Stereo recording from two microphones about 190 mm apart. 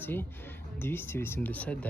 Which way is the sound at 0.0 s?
10° left (ahead or behind).